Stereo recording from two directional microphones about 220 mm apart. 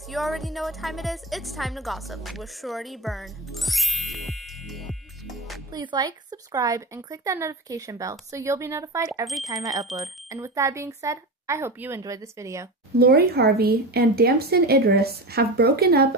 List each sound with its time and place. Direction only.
0.1 s a woman's voice: centre (ahead or behind)
5.7 s speech: 20° right (ahead or behind)
12.9 s speech: 45° right (ahead or behind)